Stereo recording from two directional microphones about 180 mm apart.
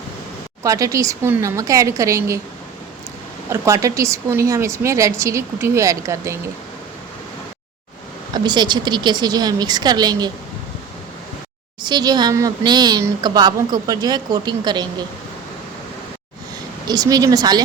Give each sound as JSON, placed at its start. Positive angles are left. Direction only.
{"t": 0.6, "sound": "speech", "side_deg": -20}
{"t": 3.5, "sound": "speech", "side_deg": -15}
{"t": 8.3, "sound": "speech", "side_deg": -25}
{"t": 11.8, "sound": "speech", "side_deg": -25}
{"t": 16.8, "sound": "speech", "side_deg": -20}